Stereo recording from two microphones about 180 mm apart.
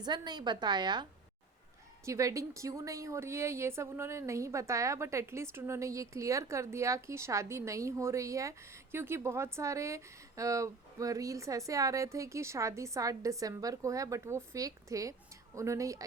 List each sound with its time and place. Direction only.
0.0 s a woman's voice: 25° right (ahead or behind)
2.0 s a woman's voice: 15° right (ahead or behind)